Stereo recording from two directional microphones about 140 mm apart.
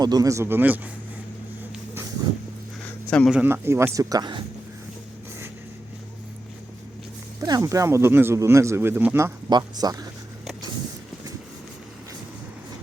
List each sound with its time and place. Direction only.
0.0 s speech: 25° right (ahead or behind)
3.1 s a man's voice: 5° left (ahead or behind)
3.3 s speech: 15° right (ahead or behind); by 4.4 s 35° right (ahead or behind)
7.4 s speech: 25° right (ahead or behind)
9.5 s speech: 30° right (ahead or behind)